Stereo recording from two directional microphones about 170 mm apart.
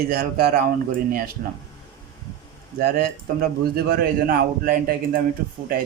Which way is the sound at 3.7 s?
60° right (ahead or behind).